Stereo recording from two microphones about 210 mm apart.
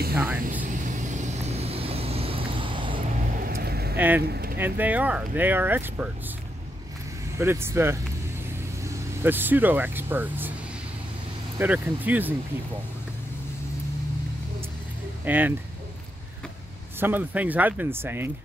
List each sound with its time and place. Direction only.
0.1 s speech: 10° right (ahead or behind)
0.5 s vehicle: 40° right (ahead or behind)
3.4 s vehicle: 45° right (ahead or behind)
3.9 s speech: 10° right (ahead or behind)
4.2 s speech: 45° right (ahead or behind)
4.6 s speech: 10° right (ahead or behind)
7.3 s speech: 10° right (ahead or behind)
11.5 s speech: 10° right (ahead or behind)
15.2 s speech: 10° right (ahead or behind)
17.0 s speech: 10° right (ahead or behind)